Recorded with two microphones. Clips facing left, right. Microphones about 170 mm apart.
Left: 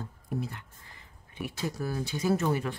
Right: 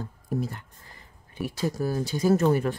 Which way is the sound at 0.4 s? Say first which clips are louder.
Right 5 dB; 40° right (ahead or behind).